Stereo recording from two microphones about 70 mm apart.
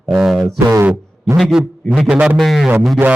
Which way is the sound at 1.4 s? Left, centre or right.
Centre.